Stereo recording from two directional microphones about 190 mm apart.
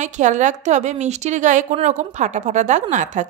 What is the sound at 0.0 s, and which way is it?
Speech, 40° right (ahead or behind).